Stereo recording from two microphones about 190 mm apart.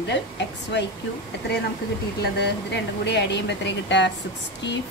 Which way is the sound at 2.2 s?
60° left (ahead or behind).